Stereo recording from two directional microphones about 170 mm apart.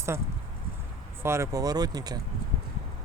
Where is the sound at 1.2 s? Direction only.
15° right (ahead or behind).